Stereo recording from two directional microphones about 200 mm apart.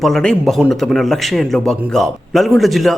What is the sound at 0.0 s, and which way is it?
A man's voice, 5° left (ahead or behind).